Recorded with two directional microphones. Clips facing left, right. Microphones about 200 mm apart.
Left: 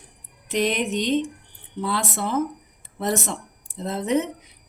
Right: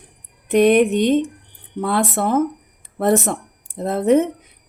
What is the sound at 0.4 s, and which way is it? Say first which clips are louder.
A woman's voice: right 10 dB; 55° right (ahead or behind).